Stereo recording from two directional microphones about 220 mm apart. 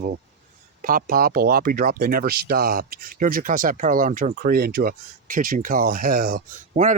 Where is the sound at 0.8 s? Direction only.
40° right (ahead or behind).